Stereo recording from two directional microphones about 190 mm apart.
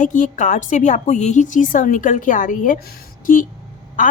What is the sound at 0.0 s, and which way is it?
A woman's voice, 45° left (ahead or behind).